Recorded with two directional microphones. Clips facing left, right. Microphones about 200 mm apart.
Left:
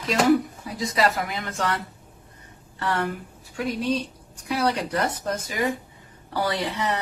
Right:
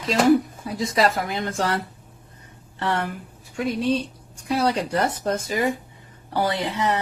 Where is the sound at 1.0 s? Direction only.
30° right (ahead or behind).